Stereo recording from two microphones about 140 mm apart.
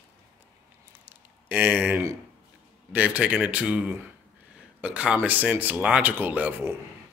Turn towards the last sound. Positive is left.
turn(degrees=-15)  # may be behind; listen again after turning